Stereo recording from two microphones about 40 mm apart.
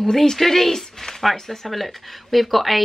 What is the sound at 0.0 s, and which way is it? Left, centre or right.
Speech, centre.